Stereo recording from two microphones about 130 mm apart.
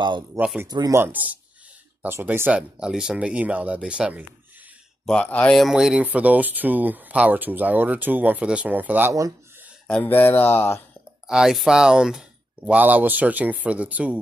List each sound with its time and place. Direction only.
0.7 s speech: 30° right (ahead or behind)
0.9 s speech: 15° right (ahead or behind)
5.0 s speech: 10° left (ahead or behind)
5.6 s speech: 5° right (ahead or behind)
9.8 s speech: 10° left (ahead or behind)
11.2 s speech: 5° right (ahead or behind)